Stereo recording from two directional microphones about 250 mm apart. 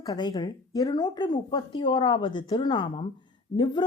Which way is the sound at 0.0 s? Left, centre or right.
Centre.